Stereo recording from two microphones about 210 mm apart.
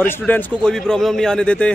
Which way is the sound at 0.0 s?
10° left (ahead or behind).